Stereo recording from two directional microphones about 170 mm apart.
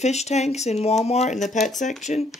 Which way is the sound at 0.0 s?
40° left (ahead or behind).